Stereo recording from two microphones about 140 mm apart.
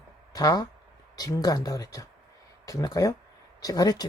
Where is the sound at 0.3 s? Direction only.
25° left (ahead or behind).